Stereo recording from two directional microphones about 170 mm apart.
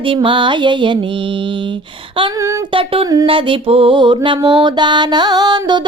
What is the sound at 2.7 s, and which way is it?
Music, 30° right (ahead or behind).